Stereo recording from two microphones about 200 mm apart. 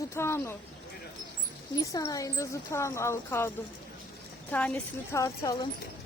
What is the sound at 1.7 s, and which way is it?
Speech, 15° left (ahead or behind).